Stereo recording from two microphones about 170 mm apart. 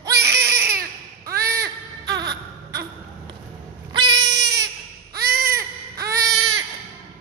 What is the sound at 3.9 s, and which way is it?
Cat, 25° right (ahead or behind).